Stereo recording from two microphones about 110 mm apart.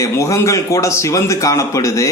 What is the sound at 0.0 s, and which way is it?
A man's voice, 30° left (ahead or behind).